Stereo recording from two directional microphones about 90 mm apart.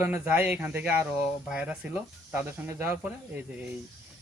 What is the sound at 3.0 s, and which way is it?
Speech, 15° right (ahead or behind).